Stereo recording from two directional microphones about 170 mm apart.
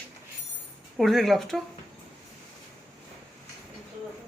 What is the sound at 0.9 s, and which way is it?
Speech, centre (ahead or behind).